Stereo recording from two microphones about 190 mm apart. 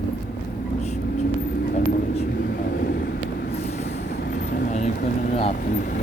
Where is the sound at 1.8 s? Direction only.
35° left (ahead or behind).